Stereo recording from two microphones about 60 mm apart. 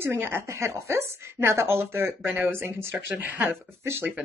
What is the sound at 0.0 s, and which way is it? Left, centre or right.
A woman's voice, right.